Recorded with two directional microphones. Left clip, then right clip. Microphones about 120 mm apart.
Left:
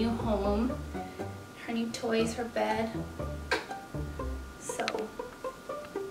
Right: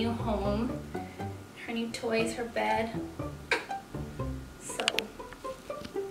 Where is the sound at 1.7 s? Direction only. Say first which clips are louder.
Even; centre (ahead or behind).